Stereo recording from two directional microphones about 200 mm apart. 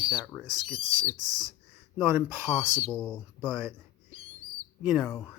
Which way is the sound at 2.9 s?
Centre (ahead or behind).